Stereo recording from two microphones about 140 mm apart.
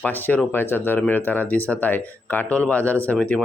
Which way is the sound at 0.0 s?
15° left (ahead or behind).